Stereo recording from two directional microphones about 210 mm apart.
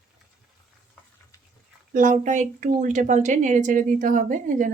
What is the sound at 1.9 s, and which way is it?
Speech, 40° right (ahead or behind).